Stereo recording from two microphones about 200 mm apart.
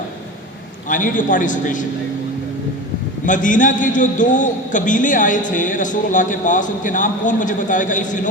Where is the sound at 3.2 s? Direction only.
40° left (ahead or behind).